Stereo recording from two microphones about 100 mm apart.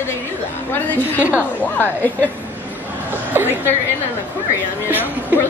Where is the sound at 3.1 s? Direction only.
20° right (ahead or behind).